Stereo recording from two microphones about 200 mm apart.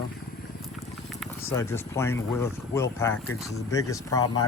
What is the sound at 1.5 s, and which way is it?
Speech, 15° left (ahead or behind).